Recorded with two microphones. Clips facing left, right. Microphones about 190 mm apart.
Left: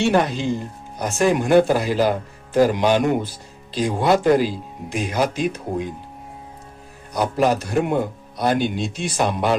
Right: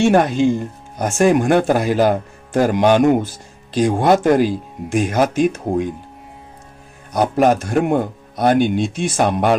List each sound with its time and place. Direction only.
0.0 s speech: 50° right (ahead or behind)
7.1 s speech: 50° right (ahead or behind)